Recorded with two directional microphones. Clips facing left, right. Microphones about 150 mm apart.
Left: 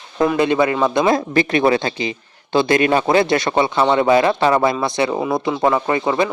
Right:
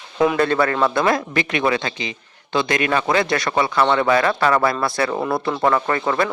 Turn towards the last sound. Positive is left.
turn(degrees=15)  # may be behind; listen again after turning